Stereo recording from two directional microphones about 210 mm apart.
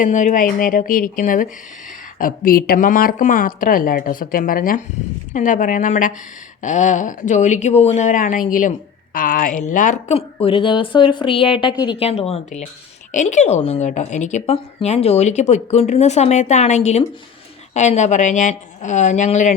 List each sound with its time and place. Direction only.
0.0 s a woman's voice: 35° left (ahead or behind)